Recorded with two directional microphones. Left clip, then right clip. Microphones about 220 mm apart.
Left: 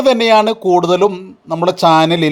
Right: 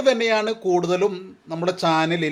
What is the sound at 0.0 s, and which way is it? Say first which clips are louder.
A man's voice: left 9 dB; 35° left (ahead or behind).